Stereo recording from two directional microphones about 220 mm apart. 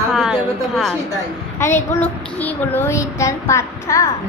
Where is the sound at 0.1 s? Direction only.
Centre (ahead or behind).